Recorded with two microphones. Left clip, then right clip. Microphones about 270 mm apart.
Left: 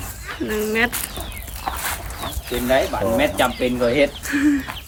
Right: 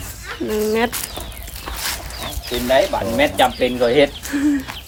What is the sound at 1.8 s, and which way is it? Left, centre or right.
Dog, centre.